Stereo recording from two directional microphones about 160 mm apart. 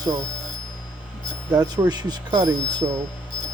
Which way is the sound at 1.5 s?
25° right (ahead or behind).